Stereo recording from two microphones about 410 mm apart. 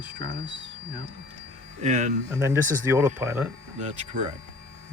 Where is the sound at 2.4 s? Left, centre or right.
Centre.